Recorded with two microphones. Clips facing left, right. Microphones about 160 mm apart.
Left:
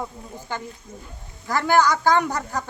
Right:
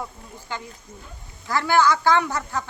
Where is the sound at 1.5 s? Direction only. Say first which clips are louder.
Even; 45° left (ahead or behind).